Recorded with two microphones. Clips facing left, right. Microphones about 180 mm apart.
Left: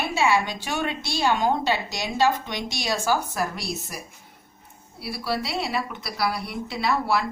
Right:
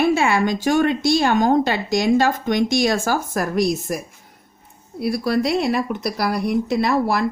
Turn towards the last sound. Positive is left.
turn(degrees=-45)  # may be behind; listen again after turning